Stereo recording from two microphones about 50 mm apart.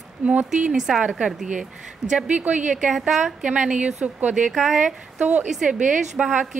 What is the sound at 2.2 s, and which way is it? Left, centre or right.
Speech, right.